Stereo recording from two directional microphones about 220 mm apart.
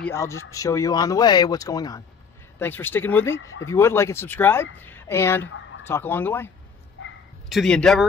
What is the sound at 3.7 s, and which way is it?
Speech, 10° left (ahead or behind).